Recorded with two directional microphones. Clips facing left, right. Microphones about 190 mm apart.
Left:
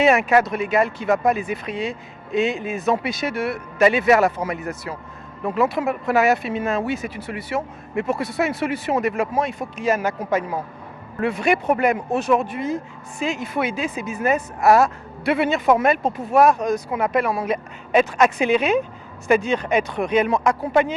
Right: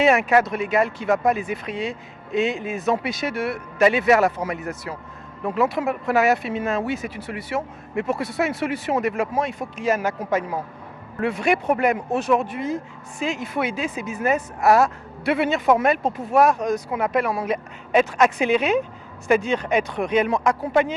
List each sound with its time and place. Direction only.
0.0 s speech: 10° left (ahead or behind)